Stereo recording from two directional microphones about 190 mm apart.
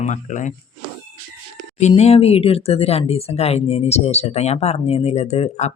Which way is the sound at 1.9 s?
30° left (ahead or behind).